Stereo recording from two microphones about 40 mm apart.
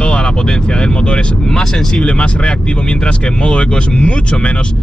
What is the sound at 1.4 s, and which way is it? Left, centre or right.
Speech, centre.